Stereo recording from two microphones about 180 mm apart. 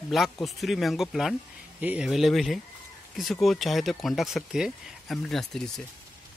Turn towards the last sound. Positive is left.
turn(degrees=0)  # may be behind; listen again after turning